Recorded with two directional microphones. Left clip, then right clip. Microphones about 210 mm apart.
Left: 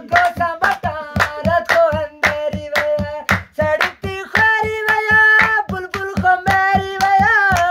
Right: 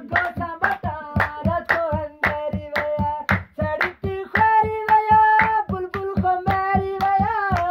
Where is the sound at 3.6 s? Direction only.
35° left (ahead or behind).